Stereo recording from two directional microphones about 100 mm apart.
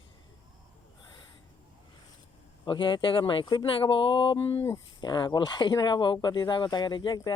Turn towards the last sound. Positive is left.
turn(degrees=50)  # may be behind; listen again after turning